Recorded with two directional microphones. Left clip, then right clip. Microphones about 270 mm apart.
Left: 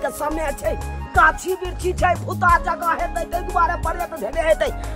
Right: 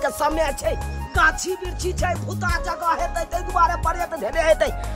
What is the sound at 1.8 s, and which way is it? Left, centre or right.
Music, centre.